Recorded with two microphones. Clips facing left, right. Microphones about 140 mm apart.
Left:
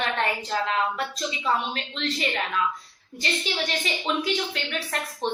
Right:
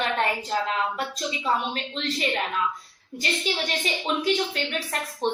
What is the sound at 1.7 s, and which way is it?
Speech, 35° right (ahead or behind).